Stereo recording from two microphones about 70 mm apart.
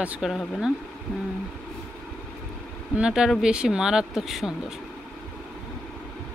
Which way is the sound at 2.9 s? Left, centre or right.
Centre.